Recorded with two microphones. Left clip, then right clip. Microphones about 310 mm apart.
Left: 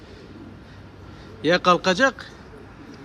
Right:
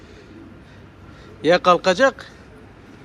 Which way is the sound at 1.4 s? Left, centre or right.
Centre.